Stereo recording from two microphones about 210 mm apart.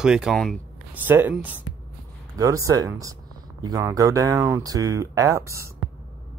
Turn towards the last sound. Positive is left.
turn(degrees=-15)  # may be behind; listen again after turning